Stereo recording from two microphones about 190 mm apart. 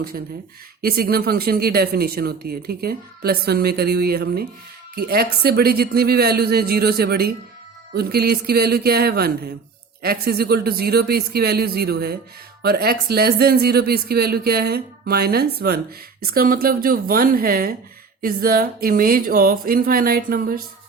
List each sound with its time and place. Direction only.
0.8 s speech: 55° right (ahead or behind)